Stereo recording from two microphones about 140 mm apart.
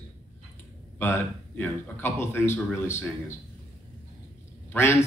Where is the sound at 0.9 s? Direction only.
15° left (ahead or behind).